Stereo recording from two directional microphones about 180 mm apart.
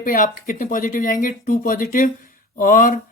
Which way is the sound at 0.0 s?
50° left (ahead or behind).